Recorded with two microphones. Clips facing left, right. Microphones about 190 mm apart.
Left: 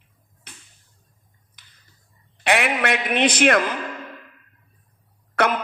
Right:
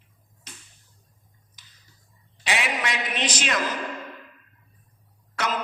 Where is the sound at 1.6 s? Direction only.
55° left (ahead or behind).